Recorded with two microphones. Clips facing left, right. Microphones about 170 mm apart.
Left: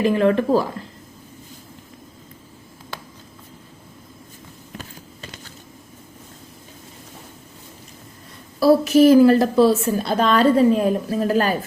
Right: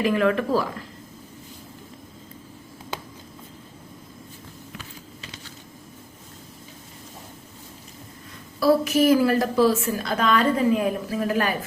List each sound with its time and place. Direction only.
0.0 s a woman's voice: 30° left (ahead or behind)
8.5 s a woman's voice: 30° left (ahead or behind)